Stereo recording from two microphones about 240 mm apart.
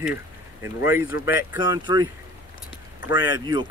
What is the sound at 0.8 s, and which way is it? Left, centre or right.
Speech, centre.